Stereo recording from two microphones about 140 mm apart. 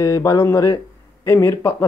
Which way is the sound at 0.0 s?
25° left (ahead or behind).